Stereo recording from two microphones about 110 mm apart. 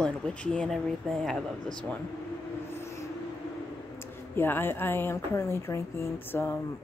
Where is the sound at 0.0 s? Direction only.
10° left (ahead or behind).